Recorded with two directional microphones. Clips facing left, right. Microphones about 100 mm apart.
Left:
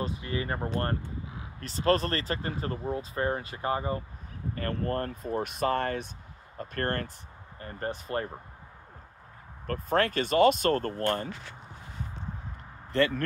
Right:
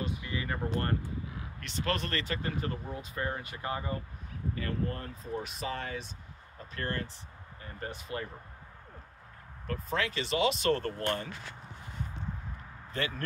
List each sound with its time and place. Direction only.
0.0 s speech: 35° left (ahead or behind)
4.6 s speech: 55° left (ahead or behind)
9.7 s speech: 50° left (ahead or behind)